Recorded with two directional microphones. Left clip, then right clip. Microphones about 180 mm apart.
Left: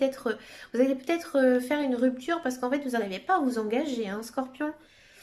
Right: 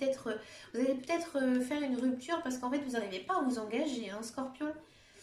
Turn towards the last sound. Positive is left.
turn(degrees=55)  # may be behind; listen again after turning